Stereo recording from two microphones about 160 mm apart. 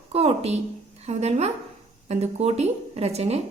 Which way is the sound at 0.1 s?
40° right (ahead or behind).